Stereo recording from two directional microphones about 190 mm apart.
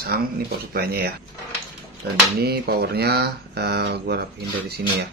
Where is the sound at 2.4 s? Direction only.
55° right (ahead or behind).